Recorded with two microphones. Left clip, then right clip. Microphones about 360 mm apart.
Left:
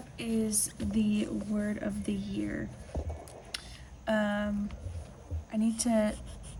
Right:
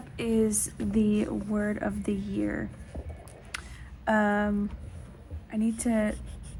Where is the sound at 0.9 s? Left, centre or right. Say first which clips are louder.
Right 5 dB; right.